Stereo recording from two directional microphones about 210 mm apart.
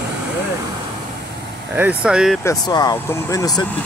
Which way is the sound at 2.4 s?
15° left (ahead or behind).